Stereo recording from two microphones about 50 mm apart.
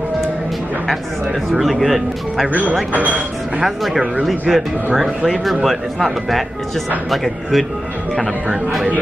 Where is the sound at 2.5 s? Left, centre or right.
Right.